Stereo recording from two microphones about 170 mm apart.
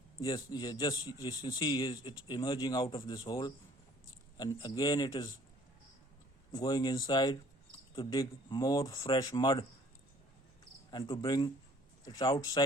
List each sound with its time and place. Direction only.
0.2 s speech: 20° left (ahead or behind)
4.6 s speech: 25° left (ahead or behind)
6.5 s speech: 25° left (ahead or behind)
10.9 s speech: 25° left (ahead or behind)